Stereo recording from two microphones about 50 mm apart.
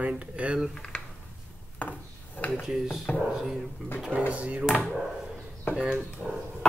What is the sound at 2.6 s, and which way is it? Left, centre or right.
Speech, centre.